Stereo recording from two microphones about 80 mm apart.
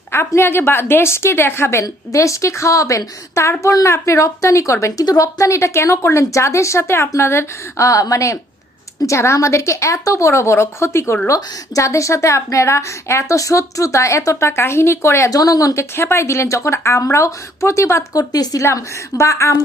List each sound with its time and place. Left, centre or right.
0.3 s a woman's voice: left
1.8 s a woman's voice: left
15.4 s a woman's voice: left
18.6 s a woman's voice: left